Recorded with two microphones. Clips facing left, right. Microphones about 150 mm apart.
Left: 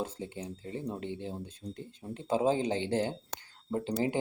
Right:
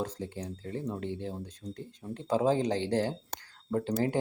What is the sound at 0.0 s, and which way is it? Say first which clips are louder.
Speech: right 1 dB; 25° left (ahead or behind).